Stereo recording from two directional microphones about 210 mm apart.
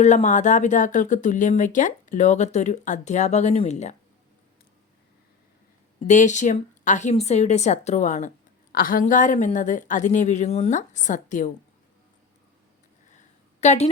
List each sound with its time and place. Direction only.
0.0 s speech: 35° left (ahead or behind)
6.1 s speech: 35° left (ahead or behind)
13.1 s a sound: 35° left (ahead or behind)